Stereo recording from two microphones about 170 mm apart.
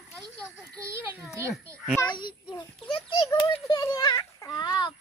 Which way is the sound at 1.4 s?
15° right (ahead or behind).